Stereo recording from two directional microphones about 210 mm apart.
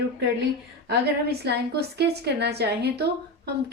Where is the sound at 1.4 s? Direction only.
50° right (ahead or behind).